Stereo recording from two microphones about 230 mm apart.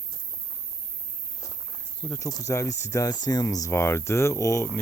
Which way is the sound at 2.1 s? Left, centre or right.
Centre.